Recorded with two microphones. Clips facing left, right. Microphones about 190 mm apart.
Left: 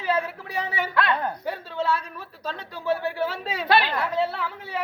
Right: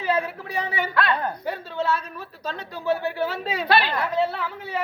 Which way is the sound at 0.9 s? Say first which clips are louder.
Even; 20° left (ahead or behind).